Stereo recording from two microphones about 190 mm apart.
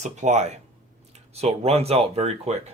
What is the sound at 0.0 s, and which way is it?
Speech, 40° right (ahead or behind).